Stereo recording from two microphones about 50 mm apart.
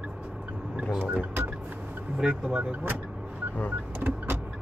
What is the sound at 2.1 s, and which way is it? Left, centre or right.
Vehicle, centre.